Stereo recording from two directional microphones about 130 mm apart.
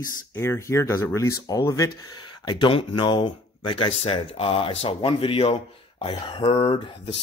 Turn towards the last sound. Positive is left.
turn(degrees=45)  # may be behind; listen again after turning